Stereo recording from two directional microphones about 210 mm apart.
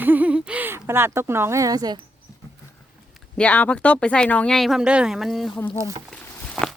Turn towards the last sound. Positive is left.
turn(degrees=5)  # may be behind; listen again after turning